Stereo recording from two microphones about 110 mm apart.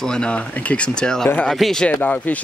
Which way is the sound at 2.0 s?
15° left (ahead or behind).